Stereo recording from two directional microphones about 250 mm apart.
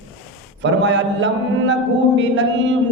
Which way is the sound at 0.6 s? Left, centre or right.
Right.